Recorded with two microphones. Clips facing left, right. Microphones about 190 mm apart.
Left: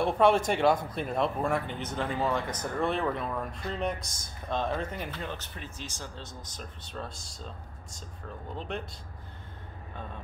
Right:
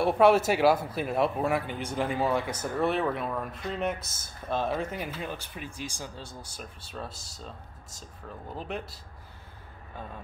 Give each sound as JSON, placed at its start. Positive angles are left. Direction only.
{"t": 0.0, "sound": "speech", "side_deg": -5}
{"t": 8.5, "sound": "speech", "side_deg": -5}